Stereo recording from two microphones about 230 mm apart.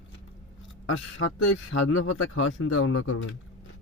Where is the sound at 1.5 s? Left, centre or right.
Left.